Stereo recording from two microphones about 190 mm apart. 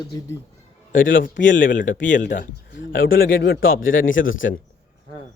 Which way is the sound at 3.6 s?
90° left.